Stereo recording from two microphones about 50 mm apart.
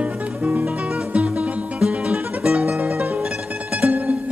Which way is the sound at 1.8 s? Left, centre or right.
Centre.